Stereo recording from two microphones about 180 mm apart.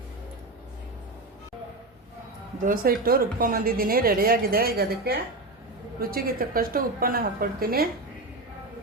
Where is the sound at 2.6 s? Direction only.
50° right (ahead or behind).